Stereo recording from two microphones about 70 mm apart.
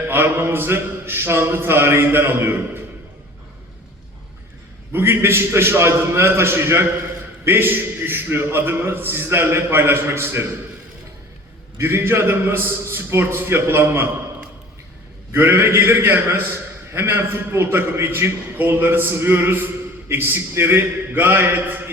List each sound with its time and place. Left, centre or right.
0.1 s a man's voice: right
4.9 s a man's voice: right
11.8 s a man's voice: right
15.3 s a man's voice: right